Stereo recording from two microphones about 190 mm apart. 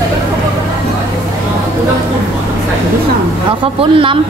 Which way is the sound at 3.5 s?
25° right (ahead or behind).